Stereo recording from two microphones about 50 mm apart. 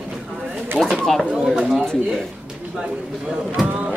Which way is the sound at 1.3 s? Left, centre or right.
Centre.